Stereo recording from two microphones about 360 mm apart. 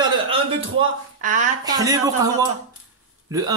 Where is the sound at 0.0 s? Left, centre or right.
Centre.